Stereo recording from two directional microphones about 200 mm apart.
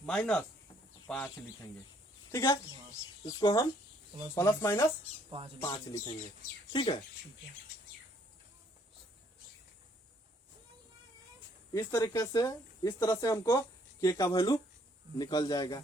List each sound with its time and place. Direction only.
0.0 s speech: 5° left (ahead or behind)
2.3 s speech: 15° left (ahead or behind)
11.7 s speech: 15° left (ahead or behind)